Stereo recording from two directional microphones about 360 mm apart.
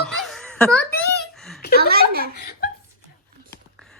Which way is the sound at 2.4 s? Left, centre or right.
Left.